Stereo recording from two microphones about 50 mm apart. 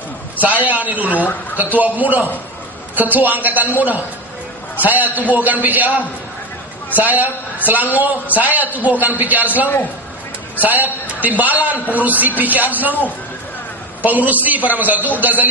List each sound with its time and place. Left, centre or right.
0.4 s a man's voice: right
14.0 s a man's voice: right